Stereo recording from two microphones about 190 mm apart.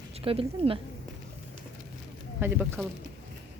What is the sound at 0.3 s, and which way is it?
Speech, 30° right (ahead or behind).